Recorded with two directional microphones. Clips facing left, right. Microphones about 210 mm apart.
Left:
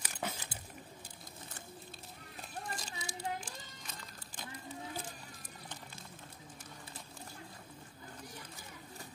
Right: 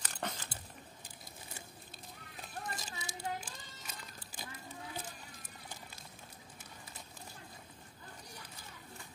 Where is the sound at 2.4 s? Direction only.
5° right (ahead or behind).